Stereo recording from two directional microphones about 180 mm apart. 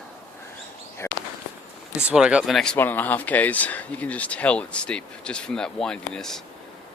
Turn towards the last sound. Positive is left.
turn(degrees=5)  # may be behind; listen again after turning